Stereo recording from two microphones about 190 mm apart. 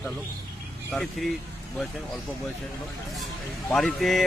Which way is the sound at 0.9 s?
Centre (ahead or behind).